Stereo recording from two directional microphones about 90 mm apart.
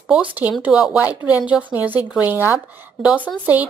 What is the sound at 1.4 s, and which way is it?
A woman's voice, 15° right (ahead or behind).